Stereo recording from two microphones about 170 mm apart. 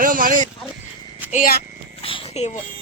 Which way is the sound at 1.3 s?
55° left (ahead or behind).